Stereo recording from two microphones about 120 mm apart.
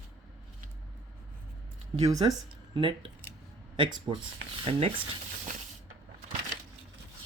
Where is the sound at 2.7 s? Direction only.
45° right (ahead or behind).